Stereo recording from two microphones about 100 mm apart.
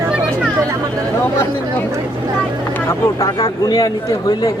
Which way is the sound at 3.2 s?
40° left (ahead or behind).